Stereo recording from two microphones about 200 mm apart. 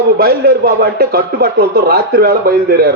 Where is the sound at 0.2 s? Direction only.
50° right (ahead or behind).